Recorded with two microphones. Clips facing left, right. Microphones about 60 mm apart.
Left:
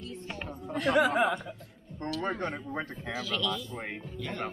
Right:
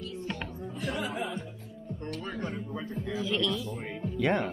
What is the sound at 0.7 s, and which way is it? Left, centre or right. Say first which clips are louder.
Speech: left 10 dB; left.